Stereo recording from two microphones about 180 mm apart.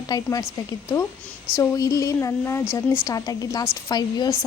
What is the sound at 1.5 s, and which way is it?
Speech, 15° left (ahead or behind).